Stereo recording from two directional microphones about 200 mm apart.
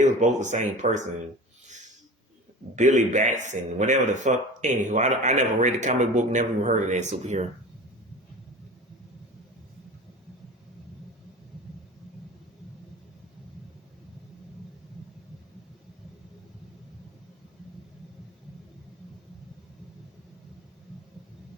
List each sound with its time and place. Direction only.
0.2 s speech: 35° right (ahead or behind)
2.7 s speech: 35° right (ahead or behind)